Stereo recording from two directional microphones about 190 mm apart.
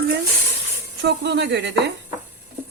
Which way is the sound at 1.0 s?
60° right (ahead or behind).